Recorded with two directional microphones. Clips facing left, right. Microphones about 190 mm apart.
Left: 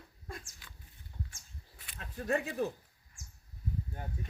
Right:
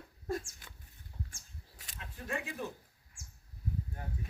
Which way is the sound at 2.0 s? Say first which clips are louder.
Left 7 dB; 40° left (ahead or behind).